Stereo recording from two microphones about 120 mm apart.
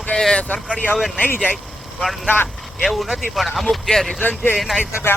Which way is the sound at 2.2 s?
15° left (ahead or behind).